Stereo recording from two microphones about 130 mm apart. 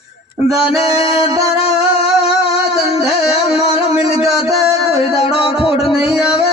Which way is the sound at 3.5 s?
50° left (ahead or behind).